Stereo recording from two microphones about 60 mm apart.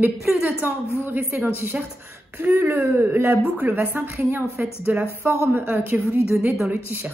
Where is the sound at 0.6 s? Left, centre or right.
Right.